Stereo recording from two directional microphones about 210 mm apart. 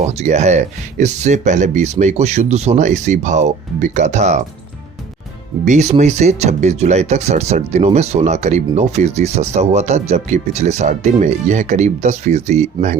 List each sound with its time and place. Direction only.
0.1 s speech: 30° right (ahead or behind)
5.6 s speech: 35° right (ahead or behind)